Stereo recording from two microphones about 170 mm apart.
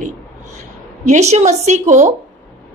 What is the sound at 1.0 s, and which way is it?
A woman's voice, 40° right (ahead or behind).